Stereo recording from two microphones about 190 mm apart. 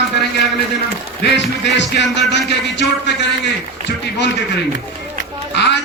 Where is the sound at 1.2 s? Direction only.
65° left (ahead or behind).